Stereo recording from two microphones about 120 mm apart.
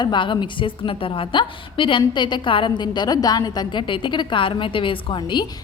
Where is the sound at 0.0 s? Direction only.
40° left (ahead or behind).